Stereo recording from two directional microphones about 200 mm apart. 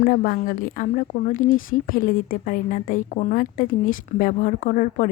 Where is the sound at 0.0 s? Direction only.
45° left (ahead or behind).